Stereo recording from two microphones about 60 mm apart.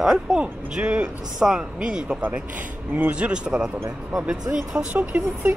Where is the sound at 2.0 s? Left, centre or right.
Right.